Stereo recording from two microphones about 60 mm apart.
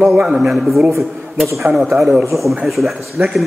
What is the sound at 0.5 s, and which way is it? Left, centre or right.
A man's voice, centre.